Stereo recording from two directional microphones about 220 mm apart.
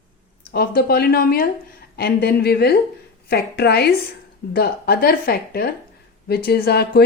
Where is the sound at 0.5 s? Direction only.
45° left (ahead or behind).